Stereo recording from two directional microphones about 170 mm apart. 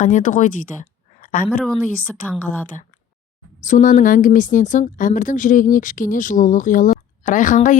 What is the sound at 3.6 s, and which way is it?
Speech, 50° left (ahead or behind).